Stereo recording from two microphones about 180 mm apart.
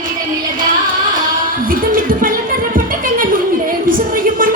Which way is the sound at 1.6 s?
50° right (ahead or behind).